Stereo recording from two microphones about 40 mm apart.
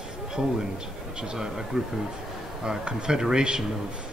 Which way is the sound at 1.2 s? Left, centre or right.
Centre.